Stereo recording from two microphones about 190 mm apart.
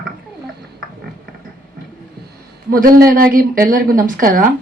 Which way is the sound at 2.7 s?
50° right (ahead or behind).